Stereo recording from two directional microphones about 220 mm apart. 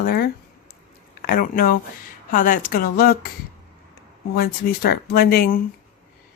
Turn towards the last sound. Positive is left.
turn(degrees=45)  # may be behind; listen again after turning